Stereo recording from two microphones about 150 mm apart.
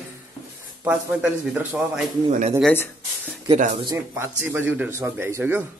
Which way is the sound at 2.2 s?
50° right (ahead or behind).